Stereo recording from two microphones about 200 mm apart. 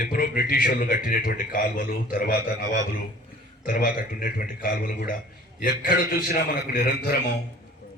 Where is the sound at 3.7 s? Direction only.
45° left (ahead or behind).